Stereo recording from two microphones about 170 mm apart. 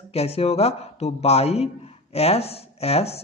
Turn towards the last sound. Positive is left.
turn(degrees=35)  # may be behind; listen again after turning